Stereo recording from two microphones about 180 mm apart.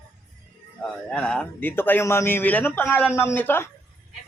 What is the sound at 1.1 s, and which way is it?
A man's voice, 5° left (ahead or behind).